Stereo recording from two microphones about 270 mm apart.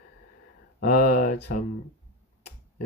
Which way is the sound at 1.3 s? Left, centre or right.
Left.